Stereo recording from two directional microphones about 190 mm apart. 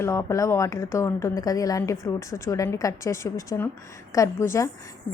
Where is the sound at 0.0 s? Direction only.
15° left (ahead or behind).